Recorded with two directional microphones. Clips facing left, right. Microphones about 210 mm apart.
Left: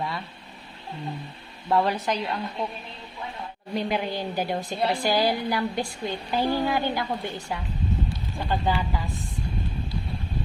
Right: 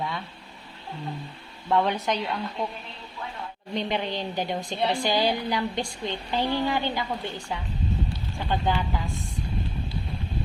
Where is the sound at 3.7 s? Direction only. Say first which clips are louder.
Left 1 dB; 5° left (ahead or behind).